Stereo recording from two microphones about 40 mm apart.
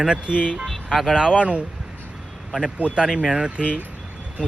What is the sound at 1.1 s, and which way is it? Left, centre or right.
Speech, centre.